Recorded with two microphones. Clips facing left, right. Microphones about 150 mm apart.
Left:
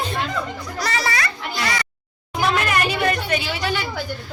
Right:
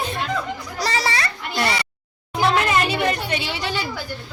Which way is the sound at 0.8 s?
30° right (ahead or behind).